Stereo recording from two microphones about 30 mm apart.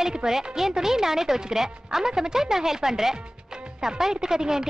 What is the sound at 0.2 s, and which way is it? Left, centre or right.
Speech, right.